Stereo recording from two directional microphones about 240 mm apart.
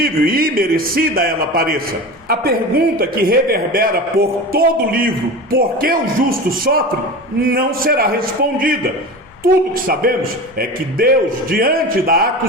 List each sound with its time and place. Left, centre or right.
0.0 s a man's voice: right
7.4 s a man's voice: right